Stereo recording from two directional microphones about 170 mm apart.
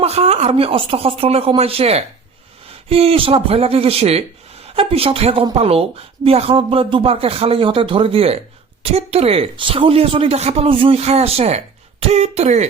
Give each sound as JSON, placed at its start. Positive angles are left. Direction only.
{"t": 0.0, "sound": "speech", "side_deg": -40}